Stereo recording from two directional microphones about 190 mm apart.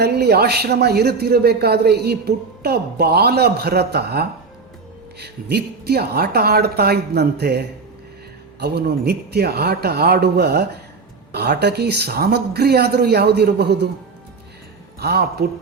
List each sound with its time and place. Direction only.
0.0 s a man's voice: 55° right (ahead or behind)
8.6 s a man's voice: 60° right (ahead or behind)
14.9 s a man's voice: 55° right (ahead or behind)